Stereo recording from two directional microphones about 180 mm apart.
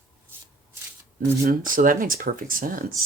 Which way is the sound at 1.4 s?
50° right (ahead or behind).